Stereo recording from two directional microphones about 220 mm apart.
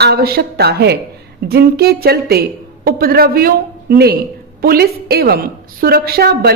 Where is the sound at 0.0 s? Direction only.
45° right (ahead or behind).